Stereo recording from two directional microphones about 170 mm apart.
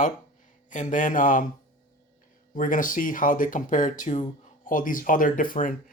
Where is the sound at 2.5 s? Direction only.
55° left (ahead or behind).